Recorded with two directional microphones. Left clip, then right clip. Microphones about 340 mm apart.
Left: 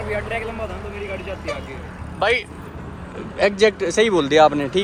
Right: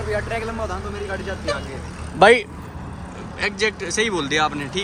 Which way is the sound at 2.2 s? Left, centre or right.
Right.